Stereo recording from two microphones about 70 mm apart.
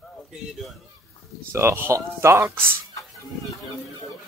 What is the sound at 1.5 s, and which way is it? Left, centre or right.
Speech, right.